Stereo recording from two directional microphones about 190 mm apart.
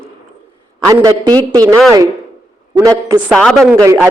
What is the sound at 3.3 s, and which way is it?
Speech, 5° left (ahead or behind).